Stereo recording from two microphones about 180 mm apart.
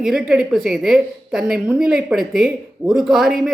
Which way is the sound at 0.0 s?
5° right (ahead or behind).